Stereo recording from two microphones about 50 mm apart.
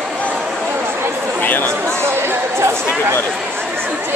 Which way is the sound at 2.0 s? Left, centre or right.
Right.